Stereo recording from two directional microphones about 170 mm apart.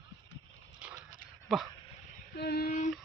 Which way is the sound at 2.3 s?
70° left (ahead or behind).